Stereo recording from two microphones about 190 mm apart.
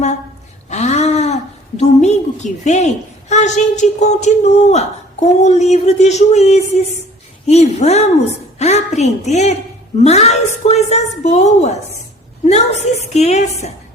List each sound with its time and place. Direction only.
0.7 s a woman's voice: 35° left (ahead or behind)
8.5 s a sound: 35° left (ahead or behind)
9.0 s a woman's voice: 35° left (ahead or behind)